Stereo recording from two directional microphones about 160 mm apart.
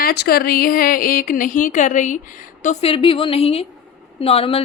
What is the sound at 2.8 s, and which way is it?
A woman's voice, 35° left (ahead or behind).